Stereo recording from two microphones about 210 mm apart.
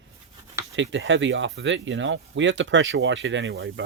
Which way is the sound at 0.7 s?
65° right (ahead or behind).